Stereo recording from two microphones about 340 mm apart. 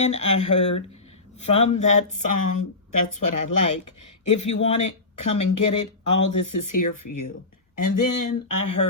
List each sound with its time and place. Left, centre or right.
0.0 s speech: centre
0.3 s speech: left
1.8 s speech: left